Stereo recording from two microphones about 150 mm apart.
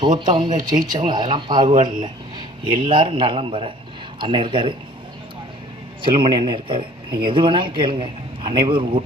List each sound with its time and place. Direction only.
0.3 s speech: 30° right (ahead or behind)
6.0 s speech: 35° right (ahead or behind)